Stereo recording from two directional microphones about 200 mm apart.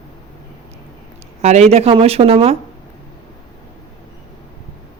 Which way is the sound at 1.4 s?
35° right (ahead or behind).